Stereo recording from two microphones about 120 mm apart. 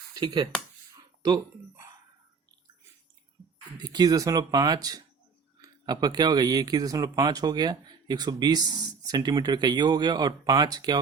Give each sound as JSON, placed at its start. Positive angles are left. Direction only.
{"t": 0.1, "sound": "speech", "side_deg": -35}
{"t": 3.8, "sound": "speech", "side_deg": -35}